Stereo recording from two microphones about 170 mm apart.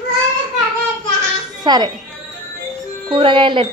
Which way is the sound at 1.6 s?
25° right (ahead or behind).